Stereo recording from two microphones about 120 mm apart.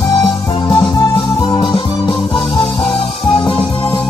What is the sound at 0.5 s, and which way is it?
Music, 40° left (ahead or behind).